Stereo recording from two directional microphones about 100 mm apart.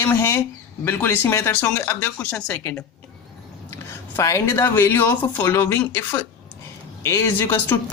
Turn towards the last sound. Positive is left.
turn(degrees=20)  # may be behind; listen again after turning